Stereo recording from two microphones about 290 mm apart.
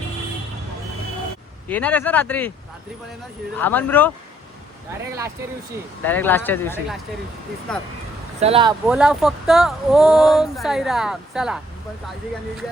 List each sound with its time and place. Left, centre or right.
1.6 s speech: centre
3.6 s speech: centre
6.1 s speech: centre
8.4 s speech: centre
8.9 s speech: centre